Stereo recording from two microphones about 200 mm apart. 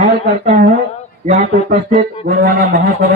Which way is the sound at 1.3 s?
35° right (ahead or behind).